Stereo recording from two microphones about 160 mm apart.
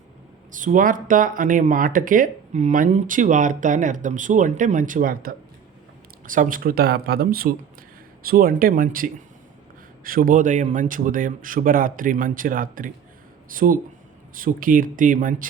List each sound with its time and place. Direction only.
0.5 s speech: 55° right (ahead or behind)